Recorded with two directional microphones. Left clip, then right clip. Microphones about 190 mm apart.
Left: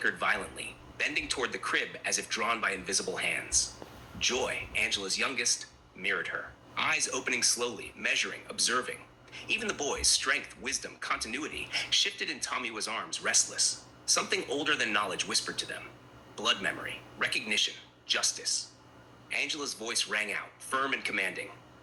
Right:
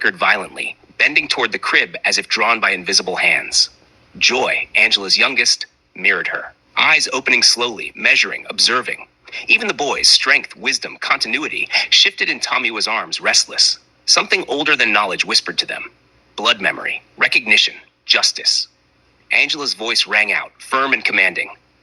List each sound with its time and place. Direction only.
0.0 s speech: 35° right (ahead or behind)